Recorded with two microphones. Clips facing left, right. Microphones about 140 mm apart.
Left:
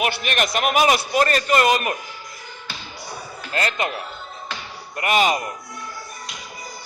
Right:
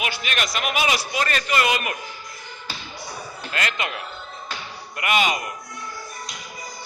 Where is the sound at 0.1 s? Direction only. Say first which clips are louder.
Left 4 dB; 50° left (ahead or behind).